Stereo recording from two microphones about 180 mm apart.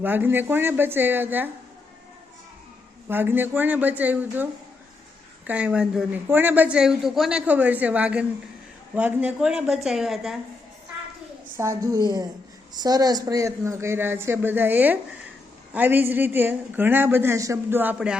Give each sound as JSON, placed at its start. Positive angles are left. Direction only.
{"t": 0.0, "sound": "a woman's voice", "side_deg": -10}
{"t": 3.1, "sound": "a woman's voice", "side_deg": -10}
{"t": 5.5, "sound": "a woman's voice", "side_deg": -5}
{"t": 11.5, "sound": "a woman's voice", "side_deg": -15}